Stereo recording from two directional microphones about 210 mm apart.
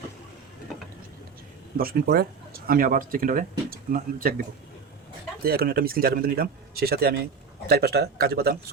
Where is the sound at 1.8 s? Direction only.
50° right (ahead or behind).